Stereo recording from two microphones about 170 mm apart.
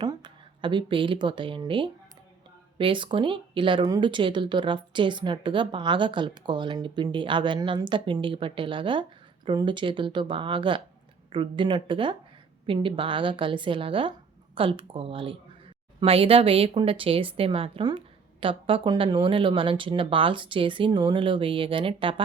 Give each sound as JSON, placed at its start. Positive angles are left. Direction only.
{"t": 0.0, "sound": "speech", "side_deg": -25}